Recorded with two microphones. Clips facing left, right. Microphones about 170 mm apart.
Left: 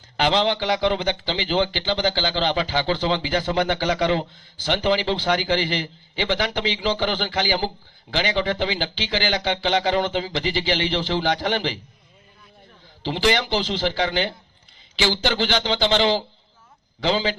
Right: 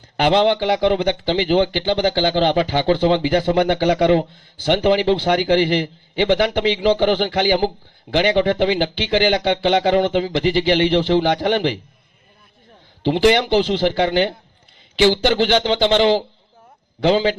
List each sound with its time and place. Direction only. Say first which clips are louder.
0.2 s speech: right 5 dB; 55° right (ahead or behind)
13.0 s a man's voice: right 7 dB; 55° right (ahead or behind)